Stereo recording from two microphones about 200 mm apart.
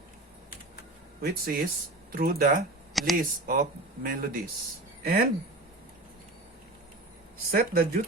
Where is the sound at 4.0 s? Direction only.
45° right (ahead or behind).